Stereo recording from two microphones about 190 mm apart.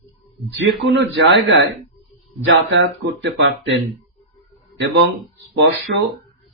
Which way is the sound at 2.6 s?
80° right.